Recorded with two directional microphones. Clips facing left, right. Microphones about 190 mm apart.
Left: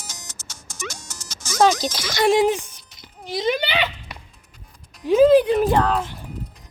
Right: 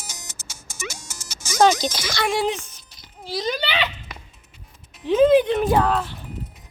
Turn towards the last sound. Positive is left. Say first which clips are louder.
# left 1 dB
turn(degrees=0)  # may be behind; listen again after turning